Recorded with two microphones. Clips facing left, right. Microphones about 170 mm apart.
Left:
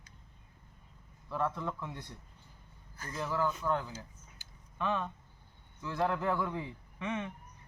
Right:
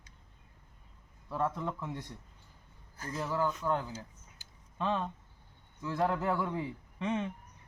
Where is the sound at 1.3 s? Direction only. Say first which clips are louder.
Right 1 dB; 15° right (ahead or behind).